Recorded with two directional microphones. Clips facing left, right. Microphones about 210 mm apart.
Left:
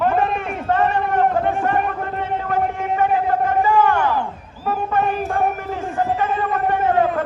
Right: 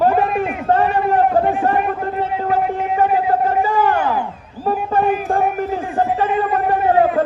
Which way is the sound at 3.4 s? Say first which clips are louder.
Even; 35° right (ahead or behind).